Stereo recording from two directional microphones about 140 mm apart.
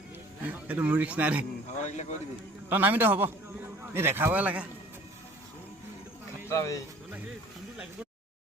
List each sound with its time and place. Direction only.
0.4 s a man's voice: 10° right (ahead or behind)
1.8 s speech: 55° left (ahead or behind)
2.6 s a man's voice: 15° right (ahead or behind)
6.5 s speech: 20° left (ahead or behind)